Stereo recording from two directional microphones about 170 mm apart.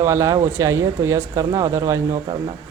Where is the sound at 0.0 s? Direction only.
15° right (ahead or behind).